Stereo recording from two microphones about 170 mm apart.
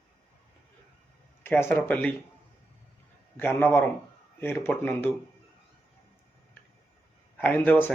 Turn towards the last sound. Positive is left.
turn(degrees=10)  # may be behind; listen again after turning